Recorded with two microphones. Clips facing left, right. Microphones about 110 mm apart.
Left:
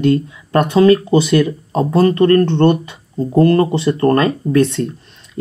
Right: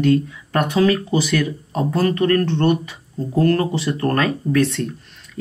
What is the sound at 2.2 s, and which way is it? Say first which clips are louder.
Speech: left 6 dB; 35° left (ahead or behind).